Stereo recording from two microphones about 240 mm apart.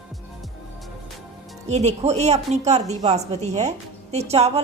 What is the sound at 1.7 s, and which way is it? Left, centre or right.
A woman's voice, right.